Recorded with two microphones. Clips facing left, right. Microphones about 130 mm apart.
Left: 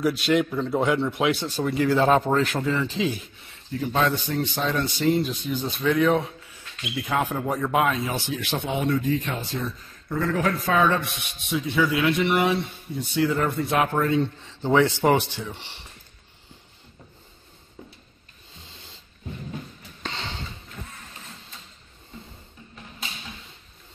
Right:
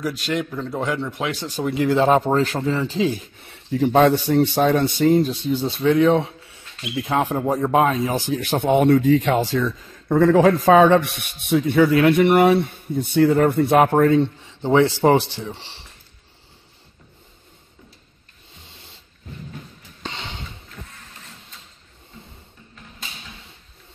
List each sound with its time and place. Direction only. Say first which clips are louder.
0.0 s a man's voice: left 3 dB; 10° left (ahead or behind)
1.5 s speech: right 2 dB; 20° right (ahead or behind)
3.9 s speech: right 8 dB; 65° right (ahead or behind)
4.6 s speech: right 8 dB; 55° right (ahead or behind)
5.3 s speech: right 6 dB; 30° right (ahead or behind); by 11.1 s 90° right
11.3 s speech: right 8 dB; 60° right (ahead or behind)
14.2 s speech: right 3 dB; 20° right (ahead or behind)
15.0 s speech: right 4 dB; 30° right (ahead or behind)
20.2 s mechanisms: even; 10° right (ahead or behind)